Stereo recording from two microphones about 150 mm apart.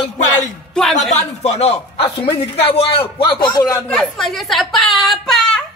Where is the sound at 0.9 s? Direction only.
50° left (ahead or behind); by 3.9 s 25° left (ahead or behind).